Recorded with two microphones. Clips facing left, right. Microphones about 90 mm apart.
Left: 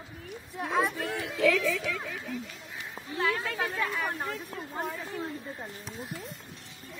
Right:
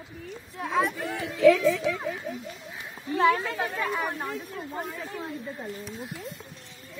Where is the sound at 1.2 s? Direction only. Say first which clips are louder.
Right 7 dB; 25° right (ahead or behind).